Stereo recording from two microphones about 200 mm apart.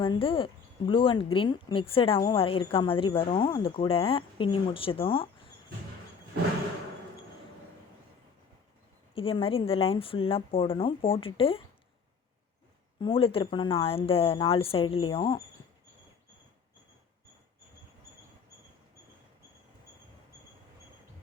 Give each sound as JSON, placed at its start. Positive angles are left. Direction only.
{"t": 0.0, "sound": "speech", "side_deg": 25}
{"t": 9.1, "sound": "speech", "side_deg": 25}
{"t": 13.0, "sound": "speech", "side_deg": 25}